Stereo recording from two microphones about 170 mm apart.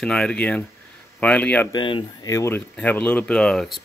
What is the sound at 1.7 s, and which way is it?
Speech, 30° left (ahead or behind).